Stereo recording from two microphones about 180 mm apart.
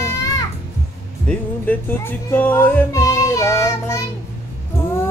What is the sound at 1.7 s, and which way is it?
Speech, 10° left (ahead or behind).